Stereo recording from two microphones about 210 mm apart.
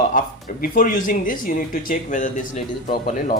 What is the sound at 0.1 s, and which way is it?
Speech, 40° left (ahead or behind).